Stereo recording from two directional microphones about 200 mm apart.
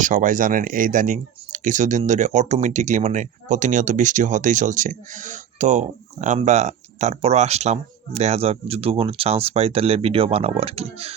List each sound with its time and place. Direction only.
0.0 s speech: 40° right (ahead or behind)